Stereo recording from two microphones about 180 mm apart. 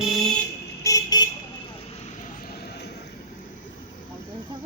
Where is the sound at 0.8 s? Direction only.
20° left (ahead or behind).